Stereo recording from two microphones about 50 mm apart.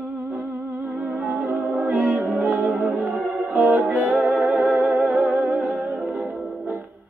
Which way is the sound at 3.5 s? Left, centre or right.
Right.